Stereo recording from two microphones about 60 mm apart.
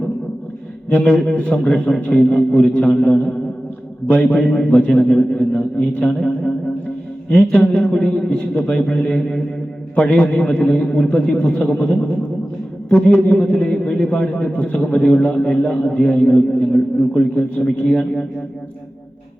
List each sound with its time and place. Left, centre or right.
0.9 s a man's voice: left
4.4 s a man's voice: centre
5.0 s a man's voice: centre
5.4 s a man's voice: left